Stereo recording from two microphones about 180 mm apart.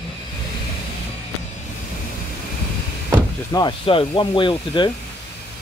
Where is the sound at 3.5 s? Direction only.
25° left (ahead or behind).